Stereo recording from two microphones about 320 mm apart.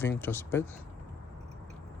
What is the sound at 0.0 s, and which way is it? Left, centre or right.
Speech, centre.